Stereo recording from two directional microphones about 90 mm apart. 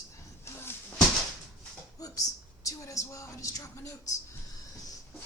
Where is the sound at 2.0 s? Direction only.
40° left (ahead or behind).